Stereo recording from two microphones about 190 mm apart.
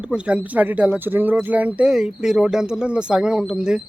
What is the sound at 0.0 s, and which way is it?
Speech, 5° right (ahead or behind).